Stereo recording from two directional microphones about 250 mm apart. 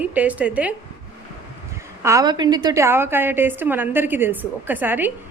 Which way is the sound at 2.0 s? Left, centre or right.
Centre.